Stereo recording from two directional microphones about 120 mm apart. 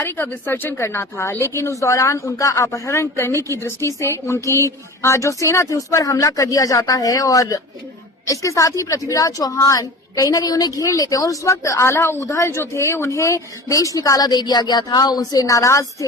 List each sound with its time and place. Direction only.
0.0 s a woman's voice: 20° left (ahead or behind)